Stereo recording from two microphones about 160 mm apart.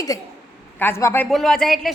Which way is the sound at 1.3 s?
Centre (ahead or behind).